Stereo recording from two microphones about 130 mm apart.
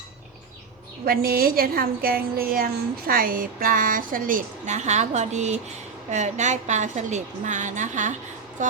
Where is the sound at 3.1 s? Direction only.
90° right.